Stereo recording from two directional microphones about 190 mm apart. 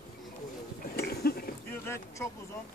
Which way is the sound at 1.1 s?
55° left (ahead or behind).